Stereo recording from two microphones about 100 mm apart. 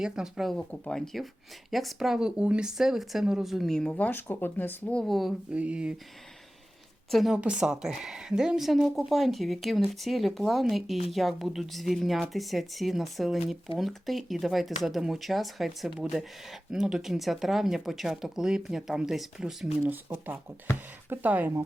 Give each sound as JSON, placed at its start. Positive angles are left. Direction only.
{"t": 0.0, "sound": "speech", "side_deg": -5}
{"t": 0.5, "sound": "speech", "side_deg": 10}
{"t": 5.5, "sound": "speech", "side_deg": -10}
{"t": 7.1, "sound": "speech", "side_deg": 0}
{"t": 19.9, "sound": "speech", "side_deg": -20}